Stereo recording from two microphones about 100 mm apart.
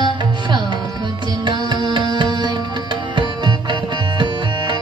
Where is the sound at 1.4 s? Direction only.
45° right (ahead or behind).